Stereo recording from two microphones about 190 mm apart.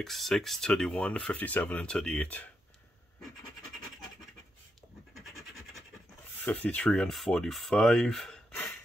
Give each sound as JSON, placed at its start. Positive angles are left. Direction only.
{"t": 0.0, "sound": "speech", "side_deg": 0}
{"t": 5.1, "sound": "scratch", "side_deg": 0}
{"t": 6.4, "sound": "speech", "side_deg": 5}